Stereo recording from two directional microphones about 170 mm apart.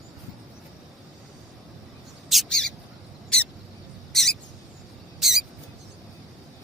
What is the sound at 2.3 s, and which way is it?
Bird, centre (ahead or behind).